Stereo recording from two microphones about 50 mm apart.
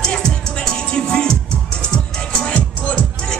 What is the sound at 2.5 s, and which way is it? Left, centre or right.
Music, left.